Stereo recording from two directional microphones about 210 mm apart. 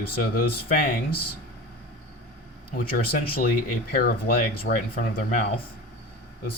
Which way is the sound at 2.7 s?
45° left (ahead or behind).